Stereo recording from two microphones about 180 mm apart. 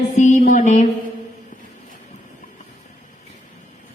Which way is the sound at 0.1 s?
40° left (ahead or behind).